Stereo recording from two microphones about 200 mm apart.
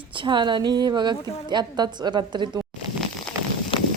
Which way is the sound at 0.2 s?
25° right (ahead or behind).